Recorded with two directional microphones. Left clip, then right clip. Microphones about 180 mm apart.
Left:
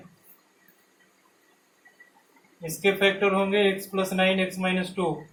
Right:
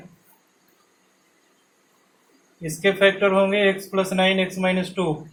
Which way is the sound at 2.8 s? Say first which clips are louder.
Right 4 dB; 50° right (ahead or behind).